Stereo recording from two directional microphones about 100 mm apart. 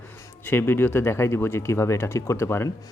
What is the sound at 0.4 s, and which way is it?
A man's voice, 20° left (ahead or behind).